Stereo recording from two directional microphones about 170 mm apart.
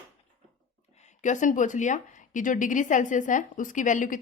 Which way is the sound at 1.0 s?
45° left (ahead or behind).